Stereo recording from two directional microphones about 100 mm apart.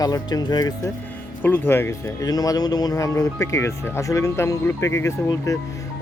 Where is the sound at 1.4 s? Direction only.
20° left (ahead or behind).